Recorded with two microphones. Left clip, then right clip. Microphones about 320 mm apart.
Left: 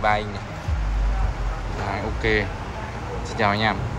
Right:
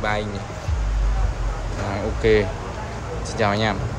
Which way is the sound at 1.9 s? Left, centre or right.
Centre.